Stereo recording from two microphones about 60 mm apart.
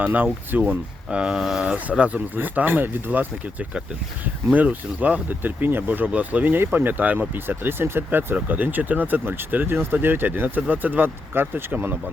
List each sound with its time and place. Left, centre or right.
0.0 s speech: right
1.1 s speech: centre
1.4 s speech: centre
1.6 s speech: centre